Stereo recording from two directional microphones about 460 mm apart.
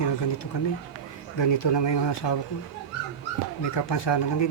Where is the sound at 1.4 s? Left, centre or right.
Left.